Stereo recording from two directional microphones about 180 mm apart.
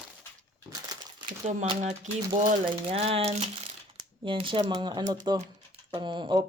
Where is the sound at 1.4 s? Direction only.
40° right (ahead or behind).